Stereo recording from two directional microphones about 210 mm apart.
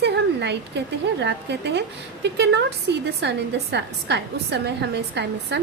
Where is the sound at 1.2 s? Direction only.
55° right (ahead or behind).